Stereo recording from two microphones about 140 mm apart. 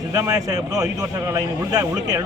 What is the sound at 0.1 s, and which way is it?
A man's voice, 20° right (ahead or behind).